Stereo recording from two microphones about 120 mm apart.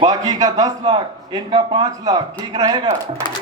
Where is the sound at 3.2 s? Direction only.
40° left (ahead or behind).